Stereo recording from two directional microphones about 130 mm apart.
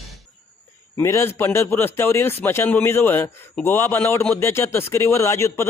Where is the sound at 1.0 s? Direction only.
20° left (ahead or behind).